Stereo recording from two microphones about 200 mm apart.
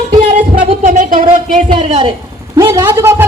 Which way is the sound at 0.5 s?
40° right (ahead or behind).